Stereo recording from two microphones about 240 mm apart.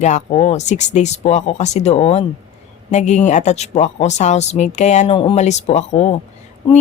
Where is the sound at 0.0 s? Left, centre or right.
Left.